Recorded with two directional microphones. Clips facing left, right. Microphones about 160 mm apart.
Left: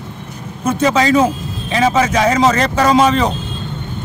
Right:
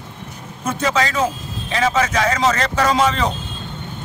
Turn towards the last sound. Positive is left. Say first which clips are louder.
# left 5 dB
turn(degrees=15)  # may be behind; listen again after turning